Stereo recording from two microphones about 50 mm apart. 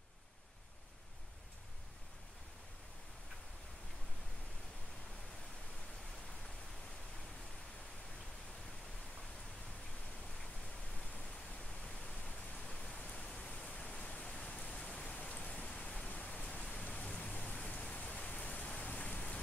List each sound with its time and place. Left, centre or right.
11.8 s pink noise: centre
13.0 s rain: left
13.5 s pink noise: left
14.2 s rain: centre
14.5 s rain: left
15.1 s pink noise: left
16.8 s rain: left